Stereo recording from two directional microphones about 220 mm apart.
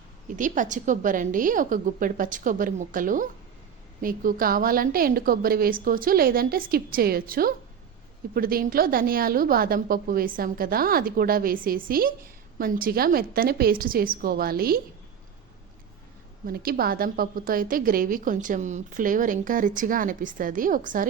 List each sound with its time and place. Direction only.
0.3 s a woman's voice: 35° right (ahead or behind)
16.5 s a woman's voice: 40° right (ahead or behind)